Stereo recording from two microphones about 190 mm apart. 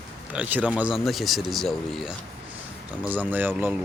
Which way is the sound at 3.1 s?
10° right (ahead or behind).